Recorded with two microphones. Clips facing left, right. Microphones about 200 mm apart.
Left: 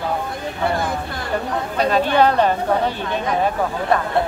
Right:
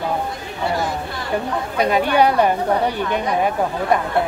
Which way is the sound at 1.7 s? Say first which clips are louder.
Even; 15° right (ahead or behind).